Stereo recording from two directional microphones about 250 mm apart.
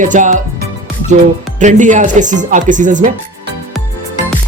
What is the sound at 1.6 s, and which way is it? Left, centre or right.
Speech, right.